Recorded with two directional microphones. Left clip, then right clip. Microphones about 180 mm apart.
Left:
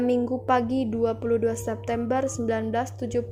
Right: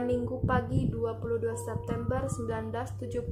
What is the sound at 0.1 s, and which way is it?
A woman's voice, 30° left (ahead or behind).